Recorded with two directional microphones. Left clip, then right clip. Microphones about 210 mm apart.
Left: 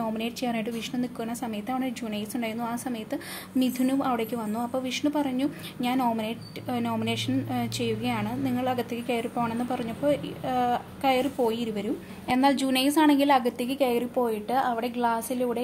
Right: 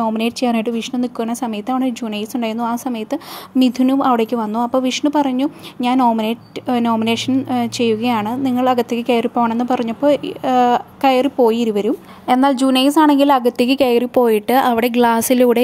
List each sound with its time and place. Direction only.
0.0 s speech: 35° right (ahead or behind); by 15.6 s 55° right (ahead or behind)